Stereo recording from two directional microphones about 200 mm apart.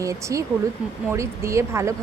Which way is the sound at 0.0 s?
15° right (ahead or behind).